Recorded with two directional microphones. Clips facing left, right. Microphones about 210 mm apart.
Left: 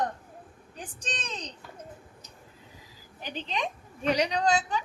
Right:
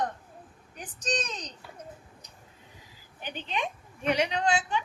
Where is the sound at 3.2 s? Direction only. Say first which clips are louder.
Even; 35° left (ahead or behind).